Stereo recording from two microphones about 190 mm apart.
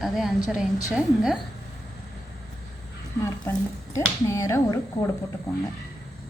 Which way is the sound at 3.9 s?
15° left (ahead or behind).